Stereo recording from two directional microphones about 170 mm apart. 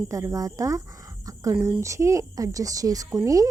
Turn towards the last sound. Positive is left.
turn(degrees=-20)  # may be behind; listen again after turning